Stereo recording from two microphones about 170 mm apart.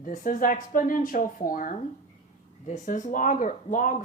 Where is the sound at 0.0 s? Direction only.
50° left (ahead or behind).